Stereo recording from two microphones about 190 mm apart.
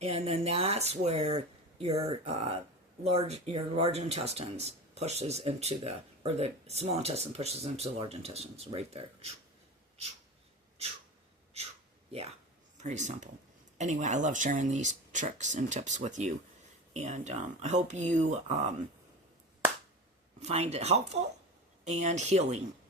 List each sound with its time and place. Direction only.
0.0 s speech: 30° right (ahead or behind)
12.7 s speech: 40° right (ahead or behind)
20.4 s speech: 35° right (ahead or behind)